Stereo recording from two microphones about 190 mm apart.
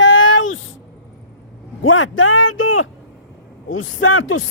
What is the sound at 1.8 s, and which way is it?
A man's voice, 90° left.